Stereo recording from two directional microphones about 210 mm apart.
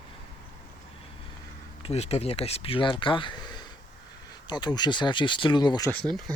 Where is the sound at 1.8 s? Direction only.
30° left (ahead or behind).